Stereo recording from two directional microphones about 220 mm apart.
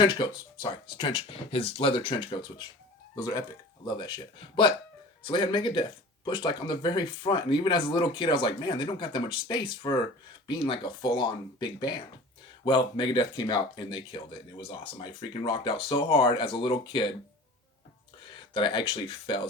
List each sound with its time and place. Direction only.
0.0 s speech: 20° left (ahead or behind)
18.5 s speech: 20° left (ahead or behind)